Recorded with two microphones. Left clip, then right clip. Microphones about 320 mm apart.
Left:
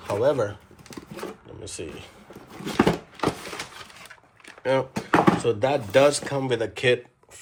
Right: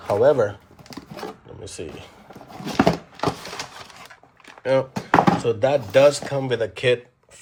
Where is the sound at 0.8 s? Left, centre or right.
Right.